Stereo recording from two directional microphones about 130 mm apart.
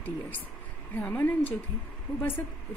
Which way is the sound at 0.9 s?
15° left (ahead or behind).